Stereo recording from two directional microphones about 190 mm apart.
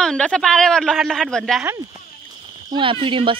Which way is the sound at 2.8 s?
25° right (ahead or behind).